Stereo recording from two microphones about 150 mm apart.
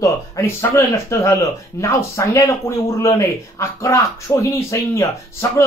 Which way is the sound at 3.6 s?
20° left (ahead or behind).